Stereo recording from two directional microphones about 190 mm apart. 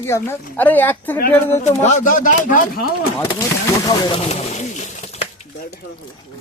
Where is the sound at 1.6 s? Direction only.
40° left (ahead or behind).